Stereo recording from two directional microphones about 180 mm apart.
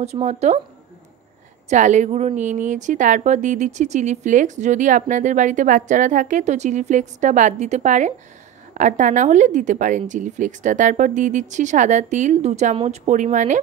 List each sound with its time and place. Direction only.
0.0 s speech: 35° right (ahead or behind)
1.7 s a woman's voice: 40° right (ahead or behind)